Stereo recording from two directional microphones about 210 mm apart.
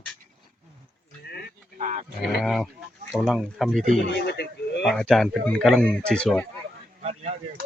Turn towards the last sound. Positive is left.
turn(degrees=-30)  # may be behind; listen again after turning